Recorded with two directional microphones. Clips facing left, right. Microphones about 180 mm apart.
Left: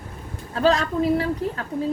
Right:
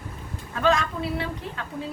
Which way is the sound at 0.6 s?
35° left (ahead or behind).